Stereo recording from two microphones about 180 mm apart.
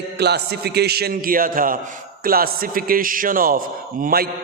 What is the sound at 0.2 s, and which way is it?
A man's voice, 65° right (ahead or behind).